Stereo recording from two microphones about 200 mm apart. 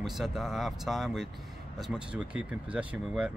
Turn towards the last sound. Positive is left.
turn(degrees=-5)  # may be behind; listen again after turning